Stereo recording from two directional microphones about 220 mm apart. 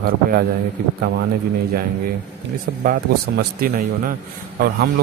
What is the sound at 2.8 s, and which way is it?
A man's voice, 40° right (ahead or behind).